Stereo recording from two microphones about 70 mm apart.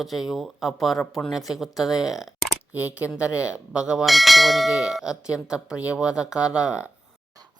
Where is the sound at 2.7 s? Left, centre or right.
Right.